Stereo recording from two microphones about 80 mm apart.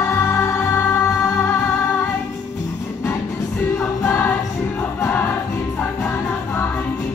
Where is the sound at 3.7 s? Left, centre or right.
Left.